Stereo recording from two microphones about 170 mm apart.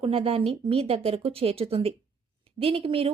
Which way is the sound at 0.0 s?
35° right (ahead or behind).